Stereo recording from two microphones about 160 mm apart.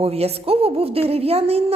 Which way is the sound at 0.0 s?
40° right (ahead or behind).